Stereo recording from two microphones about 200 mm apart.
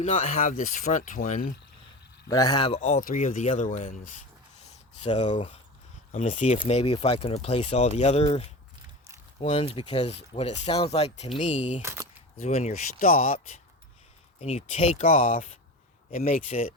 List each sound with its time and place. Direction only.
0.0 s speech: 35° left (ahead or behind)
2.3 s speech: 20° left (ahead or behind); by 4.1 s 40° left (ahead or behind)
5.0 s speech: 25° left (ahead or behind)
6.1 s speech: 35° left (ahead or behind)
11.8 s a sound: 15° right (ahead or behind)
12.4 s speech: 30° left (ahead or behind)
15.0 s speech: 45° left (ahead or behind)